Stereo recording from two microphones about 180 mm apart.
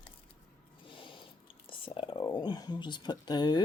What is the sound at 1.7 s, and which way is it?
Speech, 30° left (ahead or behind).